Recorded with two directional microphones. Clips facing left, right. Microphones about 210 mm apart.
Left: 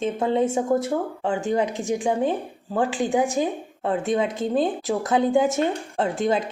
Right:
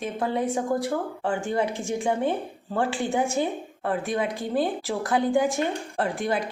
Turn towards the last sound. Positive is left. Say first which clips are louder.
# left 4 dB
turn(degrees=25)  # may be behind; listen again after turning